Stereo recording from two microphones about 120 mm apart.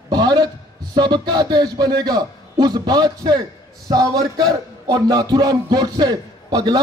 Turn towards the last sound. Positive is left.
turn(degrees=-30)  # may be behind; listen again after turning